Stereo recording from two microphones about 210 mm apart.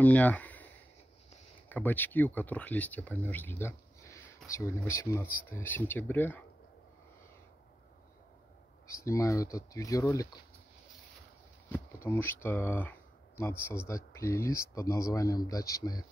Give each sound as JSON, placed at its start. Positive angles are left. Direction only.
{"t": 0.0, "sound": "speech", "side_deg": 5}
{"t": 1.7, "sound": "speech", "side_deg": 10}
{"t": 8.8, "sound": "speech", "side_deg": 15}
{"t": 11.7, "sound": "speech", "side_deg": 10}